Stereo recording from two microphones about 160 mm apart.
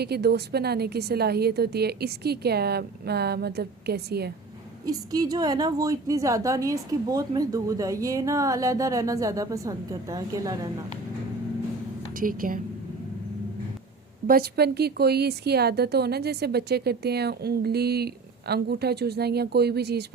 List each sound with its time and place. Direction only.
0.0 s a woman's voice: 90° right
4.9 s a woman's voice: 25° right (ahead or behind)
12.1 s a woman's voice: 60° right (ahead or behind)
14.3 s a woman's voice: 70° right (ahead or behind); by 20.1 s 90° right